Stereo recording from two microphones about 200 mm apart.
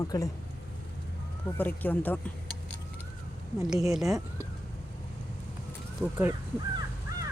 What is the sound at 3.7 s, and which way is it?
Speech, centre (ahead or behind).